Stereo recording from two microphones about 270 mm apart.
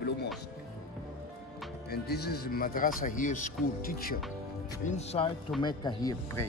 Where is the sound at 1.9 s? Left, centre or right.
Left; by 6.4 s centre.